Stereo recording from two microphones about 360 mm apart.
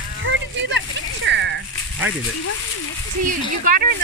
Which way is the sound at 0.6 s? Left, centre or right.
Right.